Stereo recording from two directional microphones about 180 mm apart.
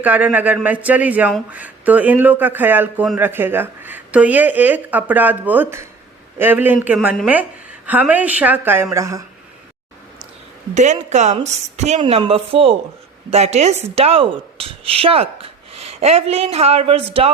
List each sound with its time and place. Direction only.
0.0 s a woman's voice: 10° right (ahead or behind)
10.8 s a woman's voice: 40° right (ahead or behind)